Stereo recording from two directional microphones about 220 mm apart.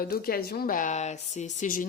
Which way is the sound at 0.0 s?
40° left (ahead or behind).